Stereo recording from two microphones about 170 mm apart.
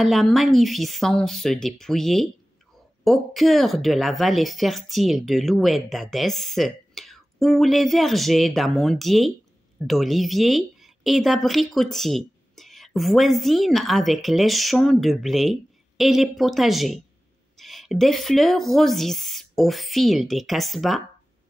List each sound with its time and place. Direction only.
0.0 s speech: centre (ahead or behind)